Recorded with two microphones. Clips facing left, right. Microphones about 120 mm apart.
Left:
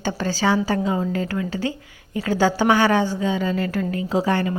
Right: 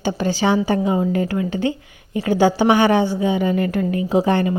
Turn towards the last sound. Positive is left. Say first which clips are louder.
# right 4 dB
turn(degrees=-20)  # may be behind; listen again after turning